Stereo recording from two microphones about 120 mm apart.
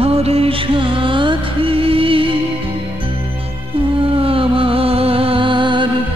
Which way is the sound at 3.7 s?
50° right (ahead or behind).